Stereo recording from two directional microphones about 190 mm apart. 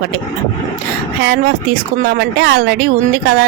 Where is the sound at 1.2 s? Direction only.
55° right (ahead or behind).